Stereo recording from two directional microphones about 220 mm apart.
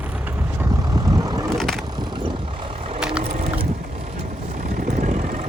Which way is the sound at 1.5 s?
Centre (ahead or behind).